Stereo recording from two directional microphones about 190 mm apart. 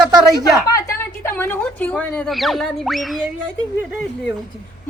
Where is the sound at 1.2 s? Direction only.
10° left (ahead or behind).